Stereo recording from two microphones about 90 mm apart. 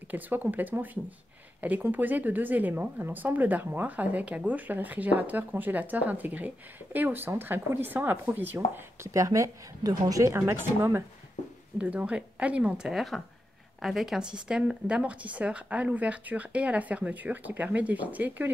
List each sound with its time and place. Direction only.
0.1 s a woman's voice: 20° right (ahead or behind)
9.1 s a woman's voice: 35° right (ahead or behind)
11.8 s speech: 15° right (ahead or behind)